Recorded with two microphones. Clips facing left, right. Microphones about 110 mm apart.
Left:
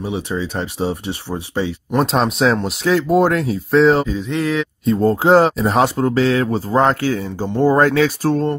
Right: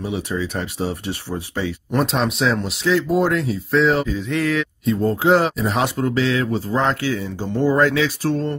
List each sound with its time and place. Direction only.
0.0 s speech: 25° left (ahead or behind)
2.0 s speech: 40° left (ahead or behind); by 4.6 s 25° left (ahead or behind)
4.8 s speech: 35° left (ahead or behind)